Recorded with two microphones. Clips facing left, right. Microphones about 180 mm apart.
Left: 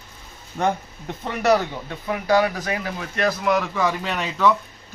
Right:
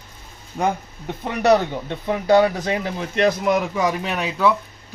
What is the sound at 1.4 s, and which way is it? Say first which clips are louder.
A man's voice: right 3 dB; 25° right (ahead or behind).